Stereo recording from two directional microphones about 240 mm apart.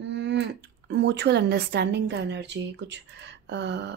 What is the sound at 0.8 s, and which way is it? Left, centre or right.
A woman's voice, right.